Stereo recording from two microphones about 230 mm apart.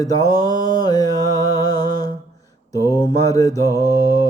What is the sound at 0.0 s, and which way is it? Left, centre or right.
Music, centre.